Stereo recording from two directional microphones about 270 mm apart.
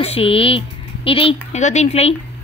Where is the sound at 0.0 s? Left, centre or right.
Left.